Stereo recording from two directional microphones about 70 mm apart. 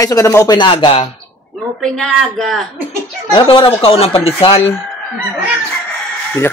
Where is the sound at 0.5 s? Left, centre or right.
Left.